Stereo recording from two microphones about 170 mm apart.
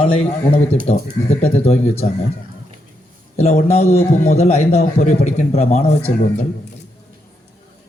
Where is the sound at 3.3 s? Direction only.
45° left (ahead or behind).